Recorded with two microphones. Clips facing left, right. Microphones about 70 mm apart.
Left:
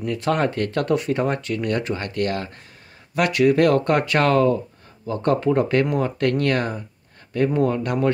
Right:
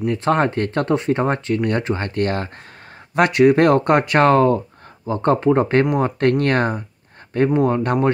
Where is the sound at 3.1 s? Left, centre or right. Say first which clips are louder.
Right 4 dB; right.